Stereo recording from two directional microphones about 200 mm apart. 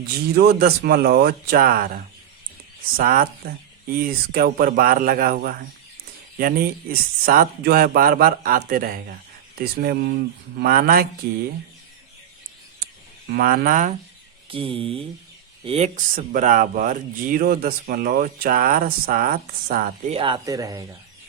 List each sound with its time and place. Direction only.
0.3 s speech: 55° right (ahead or behind)
3.0 s speech: 45° right (ahead or behind)
13.3 s speech: 45° right (ahead or behind)
14.5 s speech: 25° right (ahead or behind); by 20.1 s 45° right (ahead or behind)
20.1 s speech: 25° right (ahead or behind)